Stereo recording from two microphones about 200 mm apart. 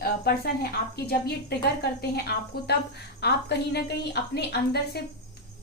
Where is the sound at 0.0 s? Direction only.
50° left (ahead or behind).